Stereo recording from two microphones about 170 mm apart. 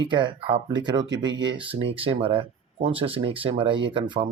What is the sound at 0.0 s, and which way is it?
Speech, 25° right (ahead or behind).